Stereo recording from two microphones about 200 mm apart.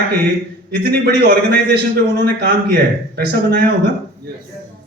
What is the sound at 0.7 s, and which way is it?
A man's voice, 55° right (ahead or behind).